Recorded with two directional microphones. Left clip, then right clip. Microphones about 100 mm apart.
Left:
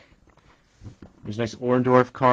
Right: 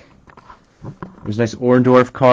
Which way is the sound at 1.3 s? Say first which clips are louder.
Right 8 dB; 35° right (ahead or behind).